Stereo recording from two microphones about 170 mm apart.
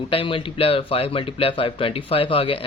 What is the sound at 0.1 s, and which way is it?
Speech, 30° left (ahead or behind).